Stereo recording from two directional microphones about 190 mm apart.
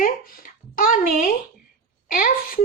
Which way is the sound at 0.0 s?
45° left (ahead or behind).